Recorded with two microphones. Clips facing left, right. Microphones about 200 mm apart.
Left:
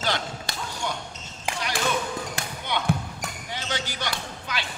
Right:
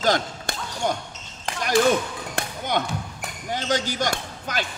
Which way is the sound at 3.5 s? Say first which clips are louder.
Right 9 dB; 45° right (ahead or behind).